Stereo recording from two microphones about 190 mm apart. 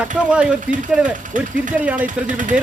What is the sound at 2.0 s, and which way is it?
Speech, 40° right (ahead or behind).